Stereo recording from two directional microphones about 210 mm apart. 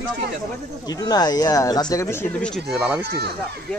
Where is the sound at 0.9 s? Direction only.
20° left (ahead or behind); by 3.0 s 5° right (ahead or behind).